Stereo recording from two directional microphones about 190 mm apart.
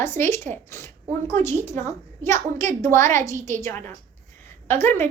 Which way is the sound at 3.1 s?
40° right (ahead or behind).